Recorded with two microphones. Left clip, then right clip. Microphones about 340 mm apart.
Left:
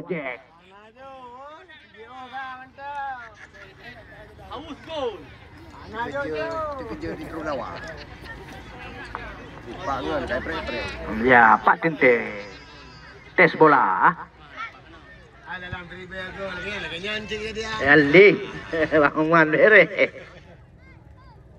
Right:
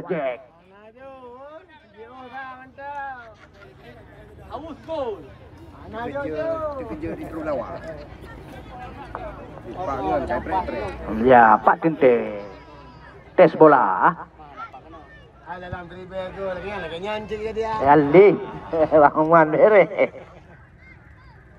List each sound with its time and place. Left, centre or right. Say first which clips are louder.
0.0 s speech: right 5 dB; centre
1.0 s a sound: even; centre
5.8 s speech: even; centre
9.8 s speech: right 2 dB; centre
10.7 s speech: right 1 dB; centre
11.1 s speech: right 2 dB; centre
15.7 s speech: right 1 dB; centre
16.3 s speech: even; centre